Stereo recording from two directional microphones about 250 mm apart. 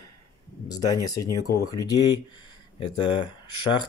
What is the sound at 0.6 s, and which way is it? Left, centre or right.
Speech, centre.